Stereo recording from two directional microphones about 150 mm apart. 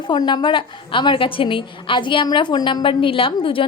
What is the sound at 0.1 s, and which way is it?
A woman's voice, 30° left (ahead or behind).